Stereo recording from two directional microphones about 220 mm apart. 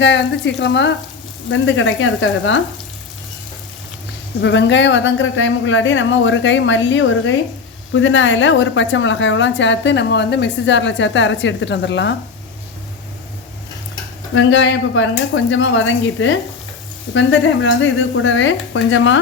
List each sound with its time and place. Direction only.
0.0 s a woman's voice: 55° left (ahead or behind)
4.4 s a woman's voice: 55° left (ahead or behind)
14.3 s a woman's voice: 55° left (ahead or behind)